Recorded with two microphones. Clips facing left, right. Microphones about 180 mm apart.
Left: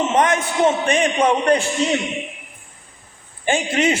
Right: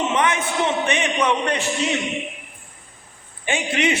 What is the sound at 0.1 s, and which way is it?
A man's voice, 40° left (ahead or behind).